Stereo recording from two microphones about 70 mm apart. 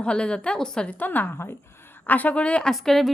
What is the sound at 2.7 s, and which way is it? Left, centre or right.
Speech, centre.